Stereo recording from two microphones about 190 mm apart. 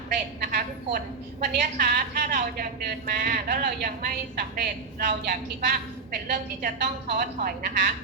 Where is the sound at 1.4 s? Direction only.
50° right (ahead or behind).